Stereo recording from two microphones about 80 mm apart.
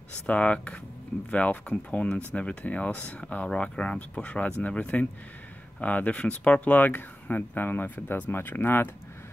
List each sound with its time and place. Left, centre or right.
0.3 s speech: centre